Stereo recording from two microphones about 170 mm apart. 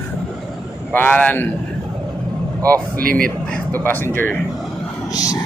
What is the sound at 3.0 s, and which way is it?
Speech, 55° right (ahead or behind).